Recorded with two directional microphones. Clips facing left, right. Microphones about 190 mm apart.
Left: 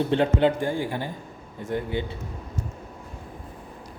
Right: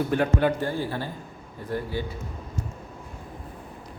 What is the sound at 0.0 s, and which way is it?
Speech, 25° left (ahead or behind).